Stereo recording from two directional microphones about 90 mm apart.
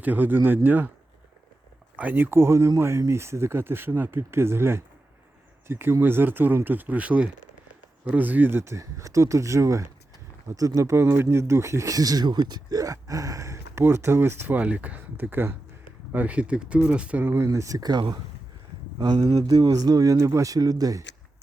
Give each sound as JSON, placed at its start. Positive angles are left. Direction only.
{"t": 0.0, "sound": "speech", "side_deg": -20}
{"t": 2.0, "sound": "speech", "side_deg": -20}
{"t": 17.3, "sound": "speech", "side_deg": -35}